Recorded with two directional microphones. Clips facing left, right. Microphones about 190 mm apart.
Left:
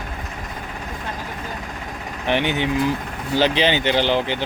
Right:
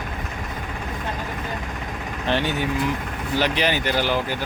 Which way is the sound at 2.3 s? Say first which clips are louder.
Left 3 dB; 20° left (ahead or behind).